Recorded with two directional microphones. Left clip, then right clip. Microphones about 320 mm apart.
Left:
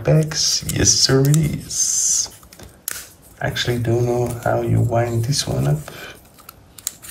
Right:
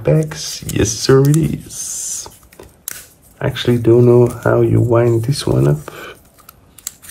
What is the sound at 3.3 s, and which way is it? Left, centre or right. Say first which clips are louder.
Speech: right 4 dB; centre.